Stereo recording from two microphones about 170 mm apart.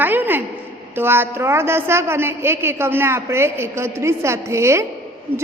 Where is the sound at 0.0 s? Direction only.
10° right (ahead or behind).